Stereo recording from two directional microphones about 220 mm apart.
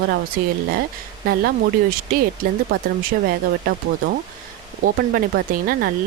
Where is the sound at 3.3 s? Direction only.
45° right (ahead or behind).